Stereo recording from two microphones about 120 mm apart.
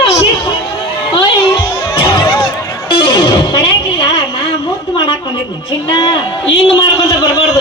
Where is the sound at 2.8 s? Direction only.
40° left (ahead or behind).